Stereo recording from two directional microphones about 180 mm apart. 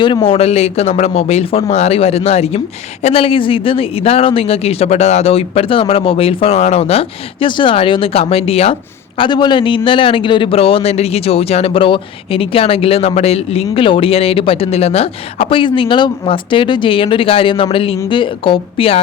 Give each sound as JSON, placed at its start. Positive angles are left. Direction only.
{"t": 0.0, "sound": "a man's voice", "side_deg": 25}